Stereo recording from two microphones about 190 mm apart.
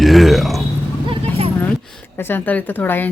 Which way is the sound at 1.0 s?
30° right (ahead or behind).